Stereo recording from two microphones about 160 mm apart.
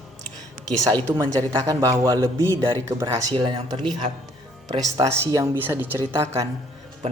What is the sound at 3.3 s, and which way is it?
Speech, 30° right (ahead or behind).